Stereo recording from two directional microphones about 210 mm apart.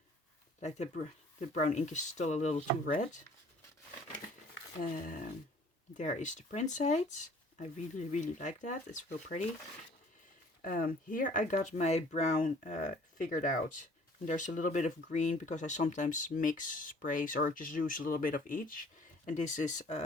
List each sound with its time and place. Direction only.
0.6 s speech: 35° left (ahead or behind)
4.8 s speech: 40° left (ahead or behind)
10.6 s speech: 45° left (ahead or behind)